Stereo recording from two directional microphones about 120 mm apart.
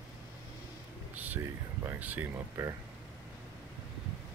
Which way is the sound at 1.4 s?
20° right (ahead or behind).